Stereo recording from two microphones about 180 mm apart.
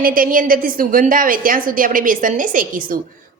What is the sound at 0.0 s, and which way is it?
A woman's voice, 50° right (ahead or behind).